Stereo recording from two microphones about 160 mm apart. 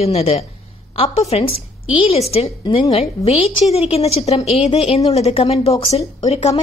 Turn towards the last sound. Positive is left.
turn(degrees=40)  # may be behind; listen again after turning